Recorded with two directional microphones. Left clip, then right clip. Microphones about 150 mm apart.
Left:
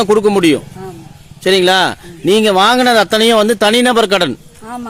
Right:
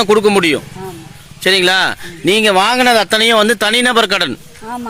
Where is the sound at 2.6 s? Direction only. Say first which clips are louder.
Left 1 dB; 35° left (ahead or behind).